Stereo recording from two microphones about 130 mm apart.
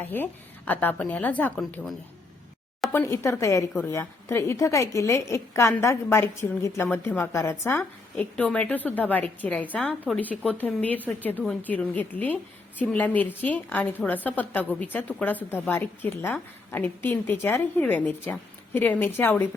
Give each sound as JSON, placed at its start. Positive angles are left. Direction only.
{"t": 0.0, "sound": "a woman's voice", "side_deg": 15}
{"t": 2.9, "sound": "a woman's voice", "side_deg": 20}
{"t": 8.2, "sound": "a woman's voice", "side_deg": 10}